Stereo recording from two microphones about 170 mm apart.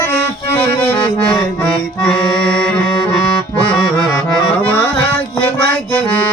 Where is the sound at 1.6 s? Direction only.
5° left (ahead or behind).